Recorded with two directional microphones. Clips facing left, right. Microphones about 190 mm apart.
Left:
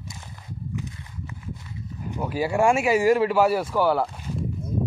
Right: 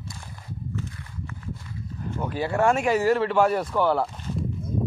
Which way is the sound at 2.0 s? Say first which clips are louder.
Left 2 dB; 15° left (ahead or behind).